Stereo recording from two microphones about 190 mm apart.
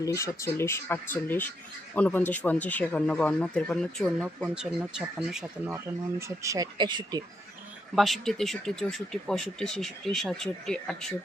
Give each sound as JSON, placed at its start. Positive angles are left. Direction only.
{"t": 0.0, "sound": "speech", "side_deg": 15}
{"t": 5.6, "sound": "speech", "side_deg": -15}
{"t": 7.9, "sound": "speech", "side_deg": 0}